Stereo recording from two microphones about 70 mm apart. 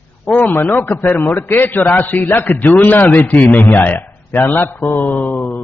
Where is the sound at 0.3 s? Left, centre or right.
Left.